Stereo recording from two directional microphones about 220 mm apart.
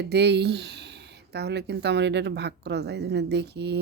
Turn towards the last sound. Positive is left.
turn(degrees=-50)  # may be behind; listen again after turning